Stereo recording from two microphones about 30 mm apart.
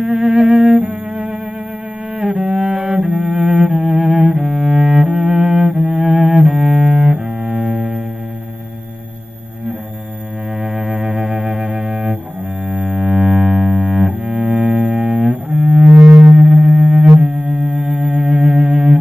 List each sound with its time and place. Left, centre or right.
0.0 s cello: right
0.3 s music: right
2.1 s cello: right
3.6 s cello: right
5.0 s cello: right
6.5 s double bass: right
7.1 s double bass: right
7.6 s music: right
10.6 s double bass: centre
12.6 s music: right
14.0 s double bass: right
16.0 s sine wave: centre
16.3 s music: right
17.2 s humming: right